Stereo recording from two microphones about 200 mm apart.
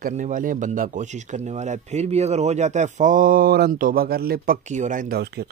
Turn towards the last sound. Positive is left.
turn(degrees=-50)  # may be behind; listen again after turning